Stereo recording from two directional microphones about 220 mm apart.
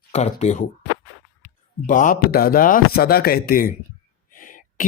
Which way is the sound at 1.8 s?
35° left (ahead or behind).